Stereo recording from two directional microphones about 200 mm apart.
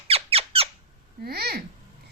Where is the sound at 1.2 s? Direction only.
50° right (ahead or behind).